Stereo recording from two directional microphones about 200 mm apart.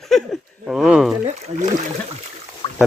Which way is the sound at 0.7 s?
Centre (ahead or behind).